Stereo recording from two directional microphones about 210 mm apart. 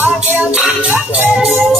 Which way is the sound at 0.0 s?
5° right (ahead or behind).